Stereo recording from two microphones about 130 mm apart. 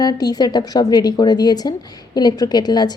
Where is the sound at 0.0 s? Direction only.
30° left (ahead or behind).